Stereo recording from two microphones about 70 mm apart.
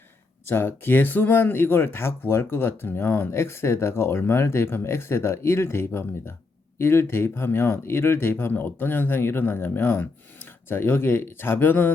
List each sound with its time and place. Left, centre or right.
0.4 s speech: left